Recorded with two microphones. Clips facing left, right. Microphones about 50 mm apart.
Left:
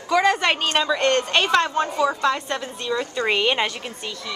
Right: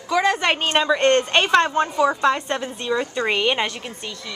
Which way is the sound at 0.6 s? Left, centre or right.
Right.